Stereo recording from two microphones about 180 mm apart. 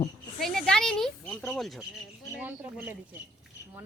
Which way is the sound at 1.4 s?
Centre (ahead or behind).